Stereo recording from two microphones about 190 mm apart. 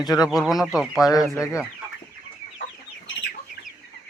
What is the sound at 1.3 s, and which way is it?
Speech, 15° left (ahead or behind).